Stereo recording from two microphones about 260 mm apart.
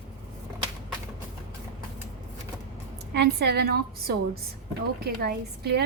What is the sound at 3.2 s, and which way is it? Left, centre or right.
A woman's voice, right.